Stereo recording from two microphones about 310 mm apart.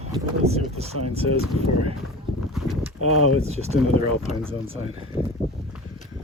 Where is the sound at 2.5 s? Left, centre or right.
Centre.